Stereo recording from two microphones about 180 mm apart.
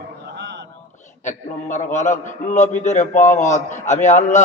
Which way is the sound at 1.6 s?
40° left (ahead or behind).